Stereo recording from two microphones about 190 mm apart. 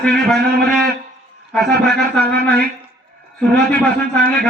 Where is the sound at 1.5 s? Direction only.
5° left (ahead or behind).